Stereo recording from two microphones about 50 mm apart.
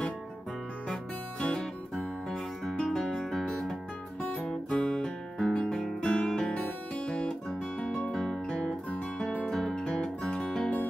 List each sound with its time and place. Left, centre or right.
1.4 s music: left
2.0 s music: centre
4.5 s guitar: centre
6.2 s music: centre
7.1 s guitar: centre
7.8 s music: centre
8.1 s music: centre
8.5 s music: centre
9.5 s music: centre